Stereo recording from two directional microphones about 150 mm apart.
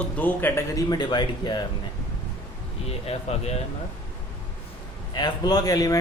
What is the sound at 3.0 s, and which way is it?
Speech, 45° left (ahead or behind).